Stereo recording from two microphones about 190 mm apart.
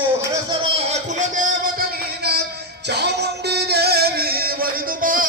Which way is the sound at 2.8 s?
60° right (ahead or behind).